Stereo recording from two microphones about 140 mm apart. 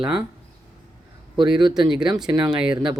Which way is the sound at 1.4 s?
35° right (ahead or behind).